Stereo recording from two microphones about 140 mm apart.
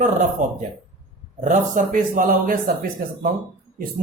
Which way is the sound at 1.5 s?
75° right (ahead or behind).